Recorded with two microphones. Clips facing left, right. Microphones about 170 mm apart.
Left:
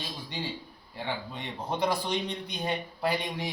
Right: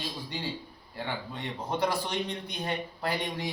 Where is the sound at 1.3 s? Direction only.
15° left (ahead or behind).